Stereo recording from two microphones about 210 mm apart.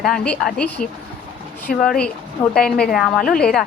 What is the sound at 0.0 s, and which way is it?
A woman's voice, centre (ahead or behind).